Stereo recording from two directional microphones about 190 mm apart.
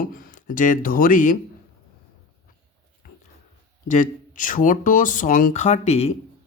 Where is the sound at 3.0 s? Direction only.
50° left (ahead or behind).